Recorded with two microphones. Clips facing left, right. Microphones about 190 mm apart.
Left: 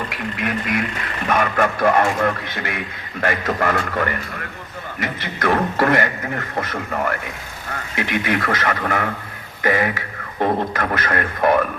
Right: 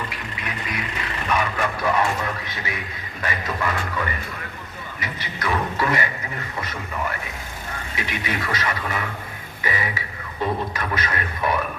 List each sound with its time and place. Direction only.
0.3 s a man's voice: 50° left (ahead or behind)